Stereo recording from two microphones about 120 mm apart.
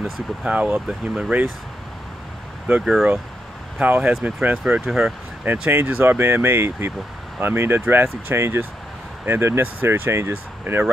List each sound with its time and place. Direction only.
0.0 s speech: 5° right (ahead or behind)
2.8 s speech: centre (ahead or behind)
3.8 s speech: 15° right (ahead or behind)
5.4 s speech: 15° right (ahead or behind)